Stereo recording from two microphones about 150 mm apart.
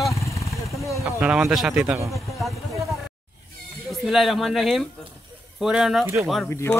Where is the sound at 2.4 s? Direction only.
Centre (ahead or behind).